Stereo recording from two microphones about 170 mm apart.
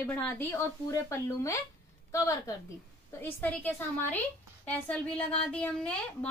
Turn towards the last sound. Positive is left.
turn(degrees=5)  # may be behind; listen again after turning